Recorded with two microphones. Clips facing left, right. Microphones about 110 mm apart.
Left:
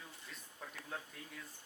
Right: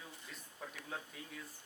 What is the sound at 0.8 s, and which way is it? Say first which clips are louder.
Speech: even; centre (ahead or behind).